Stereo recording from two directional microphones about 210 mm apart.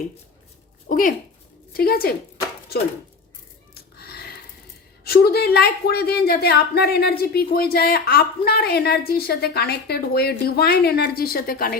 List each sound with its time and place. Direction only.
0.9 s a woman's voice: 40° left (ahead or behind)
3.9 s a sound: 50° left (ahead or behind)
5.0 s a woman's voice: 50° left (ahead or behind)